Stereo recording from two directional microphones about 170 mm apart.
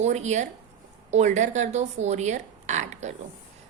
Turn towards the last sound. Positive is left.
turn(degrees=-45)  # may be behind; listen again after turning